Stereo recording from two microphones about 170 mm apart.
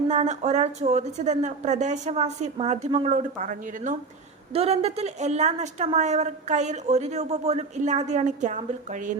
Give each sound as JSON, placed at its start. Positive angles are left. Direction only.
{"t": 0.1, "sound": "a woman's voice", "side_deg": -40}
{"t": 4.5, "sound": "a woman's voice", "side_deg": -35}